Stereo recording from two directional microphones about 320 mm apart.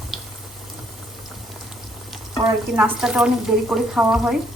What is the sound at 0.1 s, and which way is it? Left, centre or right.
Boiling, centre.